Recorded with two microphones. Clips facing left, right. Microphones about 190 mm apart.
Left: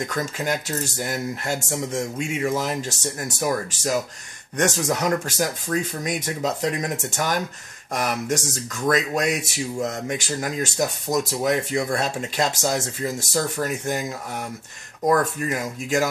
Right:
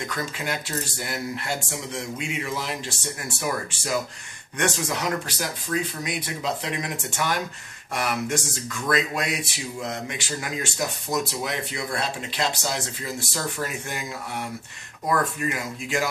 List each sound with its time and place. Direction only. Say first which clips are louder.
0.0 s speech: left 4 dB; 45° left (ahead or behind)
15.0 s speech: left 4 dB; 40° left (ahead or behind)